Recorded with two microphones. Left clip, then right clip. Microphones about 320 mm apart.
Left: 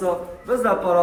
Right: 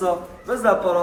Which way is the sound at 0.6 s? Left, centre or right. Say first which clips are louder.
Right 1 dB; centre.